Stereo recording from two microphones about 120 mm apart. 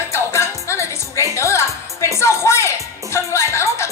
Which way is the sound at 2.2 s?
20° left (ahead or behind).